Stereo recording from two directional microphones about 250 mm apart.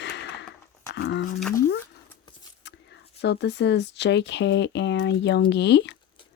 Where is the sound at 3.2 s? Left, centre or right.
Left.